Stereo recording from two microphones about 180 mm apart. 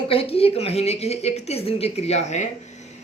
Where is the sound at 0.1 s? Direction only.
30° left (ahead or behind).